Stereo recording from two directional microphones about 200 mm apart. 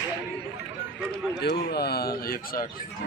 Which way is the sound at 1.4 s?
55° left (ahead or behind).